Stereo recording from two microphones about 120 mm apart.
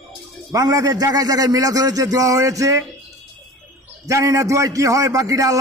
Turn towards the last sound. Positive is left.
turn(degrees=-30)  # may be behind; listen again after turning